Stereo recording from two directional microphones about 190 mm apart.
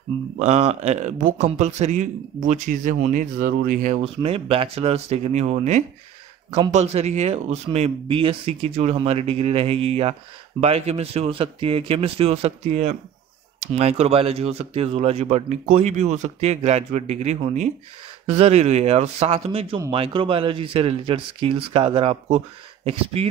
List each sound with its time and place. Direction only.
0.4 s a man's voice: 35° right (ahead or behind)